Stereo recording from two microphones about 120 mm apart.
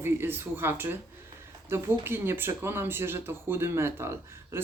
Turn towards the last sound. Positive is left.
turn(degrees=-20)  # may be behind; listen again after turning